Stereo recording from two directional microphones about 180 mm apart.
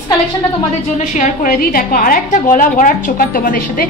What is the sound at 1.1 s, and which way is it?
A woman's voice, 45° left (ahead or behind).